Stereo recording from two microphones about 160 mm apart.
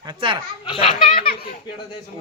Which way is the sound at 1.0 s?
60° left (ahead or behind).